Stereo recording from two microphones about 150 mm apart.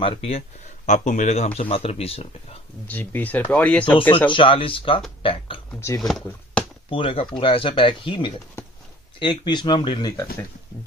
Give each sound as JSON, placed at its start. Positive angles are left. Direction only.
{"t": 0.0, "sound": "speech", "side_deg": 40}
{"t": 0.8, "sound": "speech", "side_deg": 55}
{"t": 1.6, "sound": "speech", "side_deg": 40}
{"t": 2.9, "sound": "speech", "side_deg": 10}
{"t": 4.3, "sound": "speech", "side_deg": 35}
{"t": 5.7, "sound": "speech", "side_deg": 15}
{"t": 5.9, "sound": "speech", "side_deg": 0}
{"t": 6.9, "sound": "speech", "side_deg": 35}